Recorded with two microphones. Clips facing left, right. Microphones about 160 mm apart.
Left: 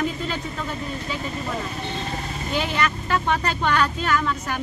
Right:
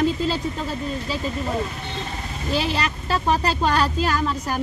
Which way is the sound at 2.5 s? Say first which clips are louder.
Right 1 dB; 35° right (ahead or behind).